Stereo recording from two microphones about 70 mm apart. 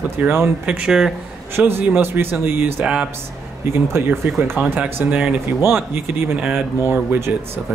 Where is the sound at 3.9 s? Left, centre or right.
Right.